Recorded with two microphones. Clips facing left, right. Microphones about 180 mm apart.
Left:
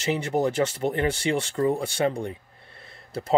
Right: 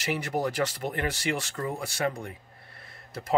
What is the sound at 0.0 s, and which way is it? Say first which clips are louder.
Speech: left 5 dB; 25° left (ahead or behind).